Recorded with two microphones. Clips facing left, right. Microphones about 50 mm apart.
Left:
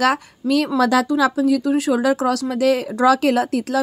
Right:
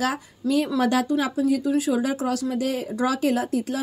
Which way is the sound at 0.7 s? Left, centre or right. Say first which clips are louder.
Left 5 dB; left.